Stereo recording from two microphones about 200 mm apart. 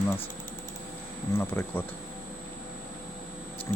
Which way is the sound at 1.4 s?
10° left (ahead or behind).